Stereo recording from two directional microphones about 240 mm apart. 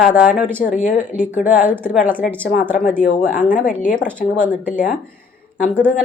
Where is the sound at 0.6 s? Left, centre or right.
Left.